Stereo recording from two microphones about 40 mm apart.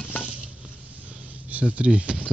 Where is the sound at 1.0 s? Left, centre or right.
Right.